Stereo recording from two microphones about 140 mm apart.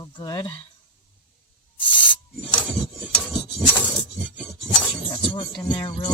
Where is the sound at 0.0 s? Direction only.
30° left (ahead or behind).